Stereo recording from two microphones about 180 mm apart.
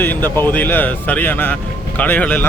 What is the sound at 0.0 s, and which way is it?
Speech, 10° left (ahead or behind).